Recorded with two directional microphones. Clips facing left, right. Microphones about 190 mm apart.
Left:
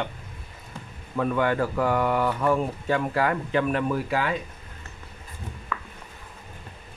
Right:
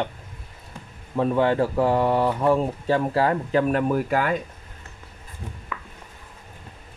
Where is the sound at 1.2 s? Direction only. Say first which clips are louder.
Right 3 dB; 30° right (ahead or behind); by 4.3 s 45° right (ahead or behind).